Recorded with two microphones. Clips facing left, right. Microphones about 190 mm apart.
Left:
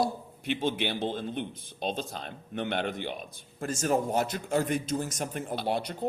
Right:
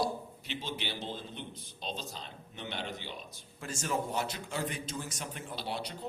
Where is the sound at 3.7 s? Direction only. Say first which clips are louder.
Left 7 dB; 45° left (ahead or behind).